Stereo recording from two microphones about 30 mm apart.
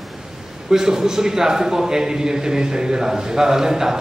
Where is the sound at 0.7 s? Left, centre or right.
Centre.